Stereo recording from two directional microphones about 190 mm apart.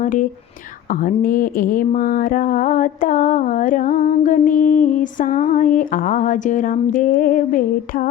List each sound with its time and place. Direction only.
0.0 s speech: 45° left (ahead or behind)
0.9 s mantra: 45° left (ahead or behind)